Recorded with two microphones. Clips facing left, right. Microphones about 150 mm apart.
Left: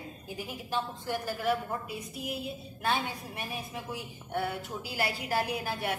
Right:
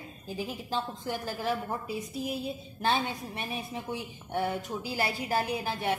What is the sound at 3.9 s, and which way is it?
A woman's voice, 25° right (ahead or behind).